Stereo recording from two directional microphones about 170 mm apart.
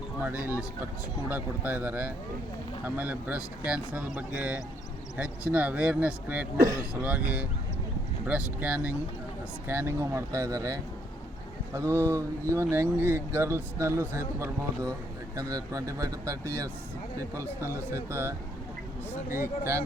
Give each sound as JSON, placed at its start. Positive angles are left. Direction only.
{"t": 0.2, "sound": "speech", "side_deg": -10}
{"t": 17.7, "sound": "speech", "side_deg": -15}